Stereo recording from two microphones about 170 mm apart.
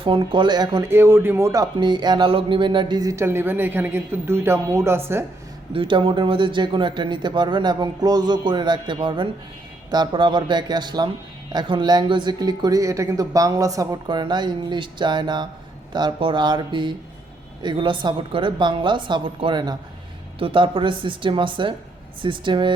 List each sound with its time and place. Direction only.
0.0 s speech: 30° right (ahead or behind)
5.7 s speech: 30° right (ahead or behind)